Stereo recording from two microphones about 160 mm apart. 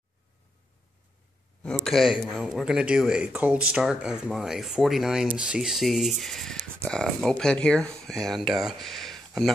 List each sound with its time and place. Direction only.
1.6 s speech: centre (ahead or behind)